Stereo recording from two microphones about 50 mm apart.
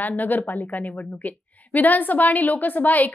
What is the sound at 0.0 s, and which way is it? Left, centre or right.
A woman's voice, left.